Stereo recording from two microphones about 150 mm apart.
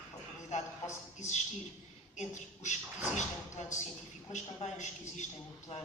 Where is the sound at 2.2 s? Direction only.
50° left (ahead or behind).